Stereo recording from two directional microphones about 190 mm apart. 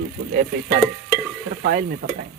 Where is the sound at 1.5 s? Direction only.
50° right (ahead or behind).